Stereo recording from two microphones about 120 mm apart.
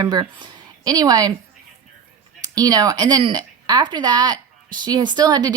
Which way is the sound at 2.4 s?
30° right (ahead or behind).